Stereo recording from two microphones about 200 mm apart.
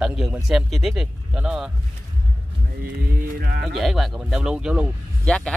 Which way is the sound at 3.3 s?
50° right (ahead or behind).